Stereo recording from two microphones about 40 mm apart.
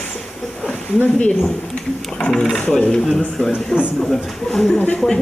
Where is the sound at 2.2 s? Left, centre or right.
Centre.